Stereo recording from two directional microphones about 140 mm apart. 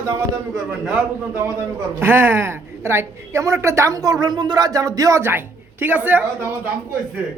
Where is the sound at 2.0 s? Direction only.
15° right (ahead or behind).